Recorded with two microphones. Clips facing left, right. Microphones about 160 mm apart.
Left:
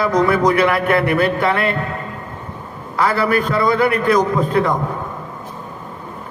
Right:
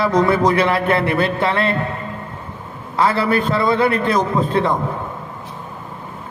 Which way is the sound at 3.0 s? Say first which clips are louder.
Even; 25° right (ahead or behind).